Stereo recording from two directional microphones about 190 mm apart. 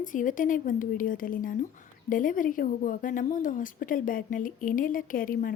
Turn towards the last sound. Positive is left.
turn(degrees=45)  # may be behind; listen again after turning